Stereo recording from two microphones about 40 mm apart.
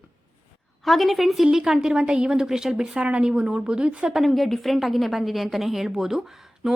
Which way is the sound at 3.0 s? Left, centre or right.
Right.